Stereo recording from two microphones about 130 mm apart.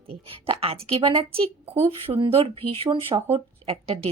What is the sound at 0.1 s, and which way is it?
Speech, 45° right (ahead or behind).